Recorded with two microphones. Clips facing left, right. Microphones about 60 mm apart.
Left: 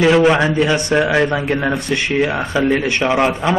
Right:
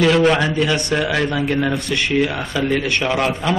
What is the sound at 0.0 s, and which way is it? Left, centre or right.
Speech, centre.